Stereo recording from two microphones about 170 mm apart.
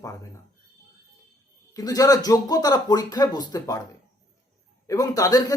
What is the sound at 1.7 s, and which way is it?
A man's voice, 20° left (ahead or behind).